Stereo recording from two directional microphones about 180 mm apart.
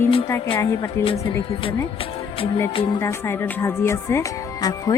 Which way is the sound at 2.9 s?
15° left (ahead or behind).